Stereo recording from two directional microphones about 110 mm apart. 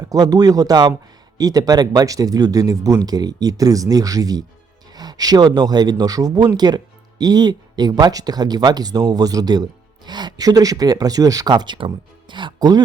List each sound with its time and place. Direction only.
0.1 s speech: 35° right (ahead or behind)